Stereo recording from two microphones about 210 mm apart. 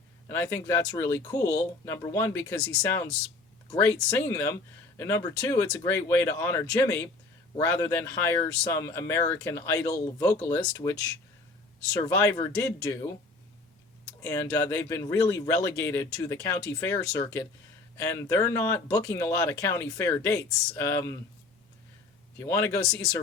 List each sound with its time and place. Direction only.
0.3 s speech: 10° left (ahead or behind)
11.9 s speech: 15° left (ahead or behind)
14.2 s speech: 15° left (ahead or behind)
22.4 s speech: 10° left (ahead or behind)